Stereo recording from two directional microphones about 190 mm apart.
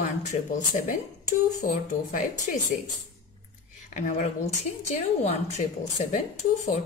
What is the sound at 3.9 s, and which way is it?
Speech, 40° left (ahead or behind).